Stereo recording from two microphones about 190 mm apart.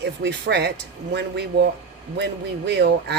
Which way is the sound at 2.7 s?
65° right (ahead or behind).